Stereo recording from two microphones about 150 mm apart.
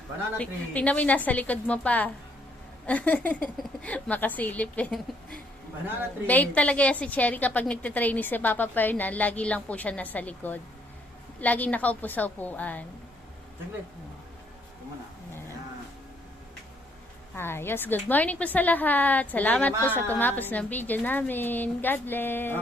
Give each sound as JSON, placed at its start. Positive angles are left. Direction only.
{"t": 0.3, "sound": "a woman's voice", "side_deg": 10}
{"t": 6.2, "sound": "a woman's voice", "side_deg": 10}
{"t": 17.3, "sound": "a woman's voice", "side_deg": 15}